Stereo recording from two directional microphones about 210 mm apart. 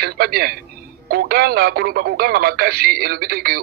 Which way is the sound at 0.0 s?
50° right (ahead or behind).